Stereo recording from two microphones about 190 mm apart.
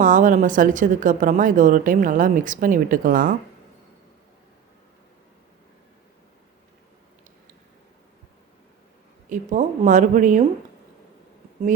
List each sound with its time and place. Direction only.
0.0 s speech: 45° right (ahead or behind)
9.3 s speech: 40° right (ahead or behind)